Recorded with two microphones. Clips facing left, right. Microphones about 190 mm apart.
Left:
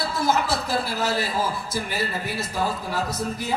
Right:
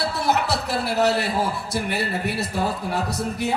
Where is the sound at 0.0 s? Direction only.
70° right (ahead or behind).